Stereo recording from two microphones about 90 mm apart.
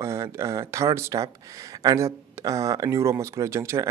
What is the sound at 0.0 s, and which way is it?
Speech, 35° right (ahead or behind).